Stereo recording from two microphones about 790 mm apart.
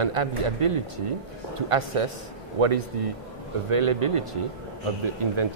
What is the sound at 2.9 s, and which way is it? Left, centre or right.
Speech, right.